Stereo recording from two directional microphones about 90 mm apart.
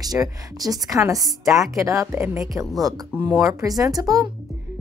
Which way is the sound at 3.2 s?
40° right (ahead or behind).